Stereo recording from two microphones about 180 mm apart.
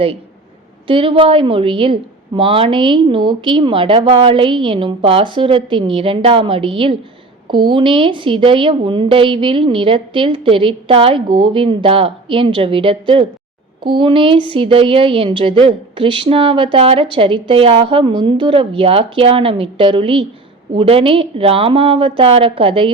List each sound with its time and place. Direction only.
0.9 s a woman's voice: 30° right (ahead or behind)